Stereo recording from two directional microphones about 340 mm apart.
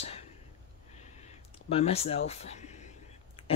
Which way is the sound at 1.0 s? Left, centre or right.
Centre.